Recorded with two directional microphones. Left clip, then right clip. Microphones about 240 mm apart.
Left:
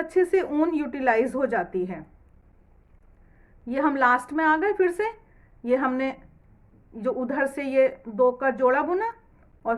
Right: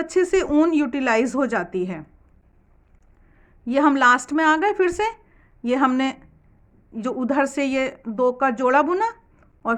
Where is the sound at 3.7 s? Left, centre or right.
Right.